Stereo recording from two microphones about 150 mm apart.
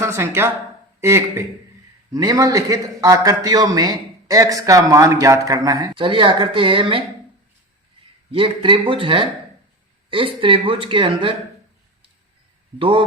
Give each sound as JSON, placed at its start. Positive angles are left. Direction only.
{"t": 0.0, "sound": "a man's voice", "side_deg": -15}
{"t": 8.3, "sound": "speech", "side_deg": -35}
{"t": 12.8, "sound": "speech", "side_deg": -35}